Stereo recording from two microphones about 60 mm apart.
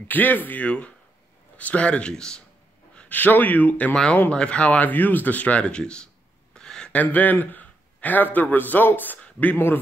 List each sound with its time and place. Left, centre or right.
0.1 s speech: left; by 2.4 s centre
3.1 s speech: left
3.9 s speech: centre
6.5 s a sound: centre
6.9 s a man's voice: left